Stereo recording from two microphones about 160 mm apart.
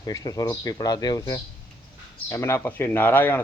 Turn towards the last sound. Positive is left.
turn(degrees=10)  # may be behind; listen again after turning